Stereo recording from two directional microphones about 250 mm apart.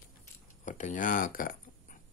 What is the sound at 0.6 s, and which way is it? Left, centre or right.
Speech, left.